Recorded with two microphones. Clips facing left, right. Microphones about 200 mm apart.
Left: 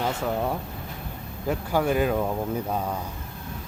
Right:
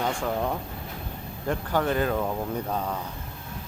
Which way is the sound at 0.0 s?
5° left (ahead or behind).